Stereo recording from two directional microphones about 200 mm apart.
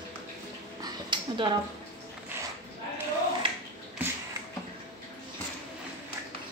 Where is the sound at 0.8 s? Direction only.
25° right (ahead or behind).